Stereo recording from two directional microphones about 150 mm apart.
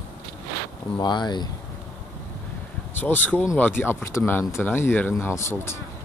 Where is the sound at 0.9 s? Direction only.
30° left (ahead or behind).